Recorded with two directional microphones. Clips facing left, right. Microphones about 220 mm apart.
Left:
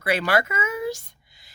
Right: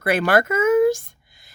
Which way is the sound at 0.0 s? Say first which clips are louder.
Right 4 dB; 50° right (ahead or behind).